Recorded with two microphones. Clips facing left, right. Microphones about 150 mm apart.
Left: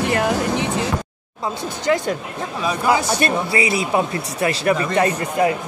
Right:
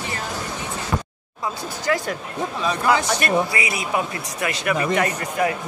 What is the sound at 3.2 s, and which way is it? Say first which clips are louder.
A man's voice: left 2 dB; 30° left (ahead or behind).